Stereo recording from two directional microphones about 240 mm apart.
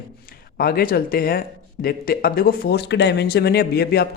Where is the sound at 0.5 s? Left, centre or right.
Left.